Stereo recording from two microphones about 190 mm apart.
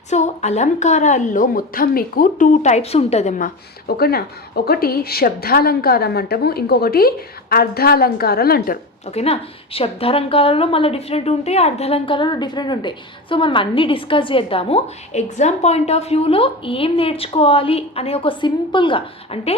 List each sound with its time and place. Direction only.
0.1 s a woman's voice: 35° left (ahead or behind)
9.0 s a woman's voice: 35° left (ahead or behind)